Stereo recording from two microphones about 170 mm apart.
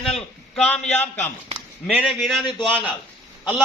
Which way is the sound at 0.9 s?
40° left (ahead or behind).